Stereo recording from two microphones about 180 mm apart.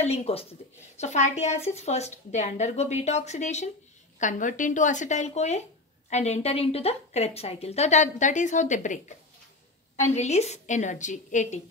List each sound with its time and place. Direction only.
0.0 s a woman's voice: 35° left (ahead or behind)
10.1 s a woman's voice: 40° left (ahead or behind)